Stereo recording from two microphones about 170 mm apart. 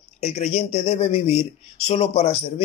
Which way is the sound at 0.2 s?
40° left (ahead or behind).